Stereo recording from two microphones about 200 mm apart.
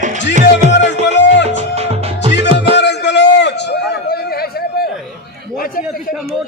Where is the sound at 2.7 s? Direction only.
60° left (ahead or behind).